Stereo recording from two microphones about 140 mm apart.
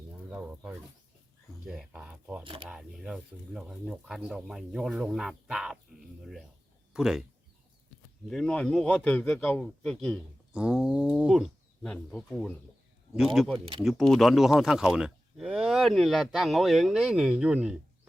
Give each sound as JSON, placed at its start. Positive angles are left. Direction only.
{"t": 0.2, "sound": "bird", "side_deg": -10}
{"t": 1.6, "sound": "speech", "side_deg": -5}
{"t": 2.4, "sound": "speech", "side_deg": -40}
{"t": 2.6, "sound": "speech", "side_deg": -5}
{"t": 6.9, "sound": "speech", "side_deg": -5}
{"t": 8.3, "sound": "speech", "side_deg": 5}
{"t": 10.5, "sound": "speech", "side_deg": -5}